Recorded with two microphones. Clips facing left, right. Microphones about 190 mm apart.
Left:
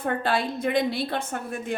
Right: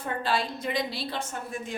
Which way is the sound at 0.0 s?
55° left (ahead or behind).